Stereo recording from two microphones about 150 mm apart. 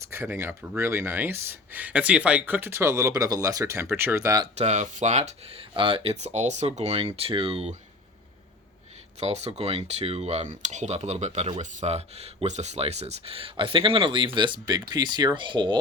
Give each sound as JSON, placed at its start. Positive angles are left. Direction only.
{"t": 0.1, "sound": "speech", "side_deg": -15}
{"t": 4.5, "sound": "speech", "side_deg": -50}
{"t": 9.2, "sound": "speech", "side_deg": -45}